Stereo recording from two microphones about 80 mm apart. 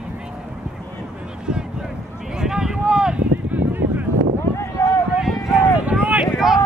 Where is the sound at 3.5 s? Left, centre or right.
Right.